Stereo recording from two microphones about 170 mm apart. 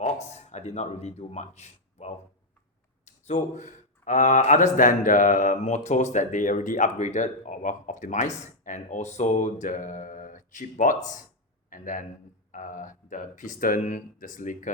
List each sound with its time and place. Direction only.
0.0 s speech: 40° left (ahead or behind)